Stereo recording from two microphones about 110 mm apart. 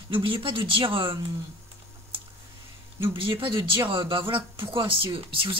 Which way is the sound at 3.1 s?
50° right (ahead or behind).